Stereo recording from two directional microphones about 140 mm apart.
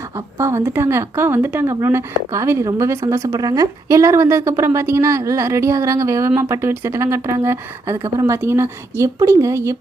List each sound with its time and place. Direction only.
0.3 s a woman's voice: 20° right (ahead or behind)